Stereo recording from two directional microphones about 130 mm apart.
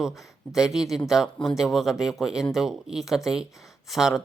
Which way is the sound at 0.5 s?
5° right (ahead or behind).